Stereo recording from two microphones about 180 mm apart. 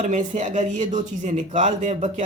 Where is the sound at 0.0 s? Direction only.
40° right (ahead or behind).